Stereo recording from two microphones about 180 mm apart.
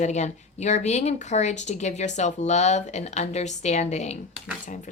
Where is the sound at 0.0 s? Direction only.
40° left (ahead or behind).